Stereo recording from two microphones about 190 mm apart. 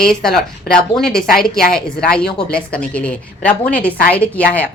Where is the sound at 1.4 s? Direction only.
5° left (ahead or behind).